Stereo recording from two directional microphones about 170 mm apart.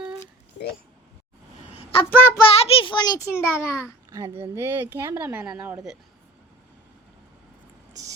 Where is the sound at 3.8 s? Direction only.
15° right (ahead or behind).